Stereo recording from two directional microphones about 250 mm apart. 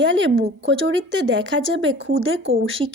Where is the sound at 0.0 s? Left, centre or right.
Right.